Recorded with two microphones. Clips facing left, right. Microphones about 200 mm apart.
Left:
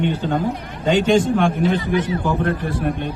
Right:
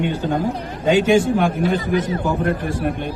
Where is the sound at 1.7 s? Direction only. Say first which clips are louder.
Even; 40° right (ahead or behind).